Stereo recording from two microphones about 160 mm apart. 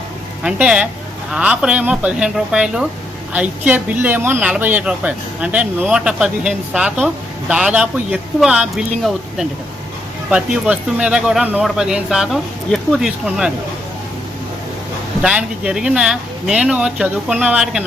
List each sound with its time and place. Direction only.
0.4 s speech: 5° right (ahead or behind)
15.2 s speech: 5° right (ahead or behind)